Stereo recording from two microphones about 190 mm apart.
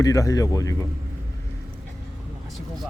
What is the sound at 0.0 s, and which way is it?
Speech, 15° left (ahead or behind).